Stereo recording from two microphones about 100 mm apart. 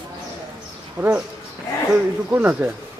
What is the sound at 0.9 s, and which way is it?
Speech, 10° right (ahead or behind).